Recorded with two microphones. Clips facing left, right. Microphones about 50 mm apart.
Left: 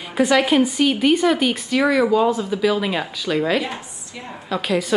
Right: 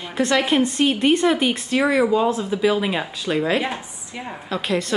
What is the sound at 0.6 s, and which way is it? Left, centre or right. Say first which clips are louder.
Speech: left 1 dB; centre.